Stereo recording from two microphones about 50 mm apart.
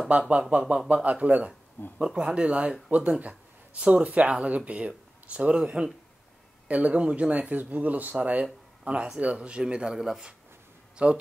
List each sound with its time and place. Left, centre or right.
0.3 s speech: right
1.8 s speech: left
2.1 s speech: centre
11.0 s speech: right